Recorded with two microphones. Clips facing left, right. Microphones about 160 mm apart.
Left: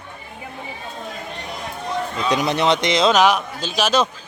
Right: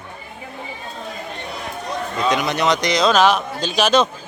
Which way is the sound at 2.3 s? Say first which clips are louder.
Left 1 dB; 30° left (ahead or behind).